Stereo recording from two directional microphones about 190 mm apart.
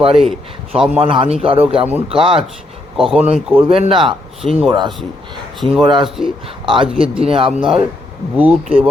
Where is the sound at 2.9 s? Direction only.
5° right (ahead or behind).